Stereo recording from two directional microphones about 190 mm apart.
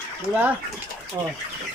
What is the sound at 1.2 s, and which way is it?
Speech, 15° right (ahead or behind).